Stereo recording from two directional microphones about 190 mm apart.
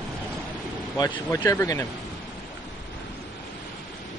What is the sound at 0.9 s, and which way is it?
Speech, 20° left (ahead or behind).